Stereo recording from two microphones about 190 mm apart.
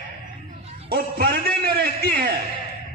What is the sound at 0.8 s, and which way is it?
A man's voice, 55° right (ahead or behind).